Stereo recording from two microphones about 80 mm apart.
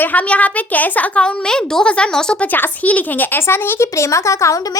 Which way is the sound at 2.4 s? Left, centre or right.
Left.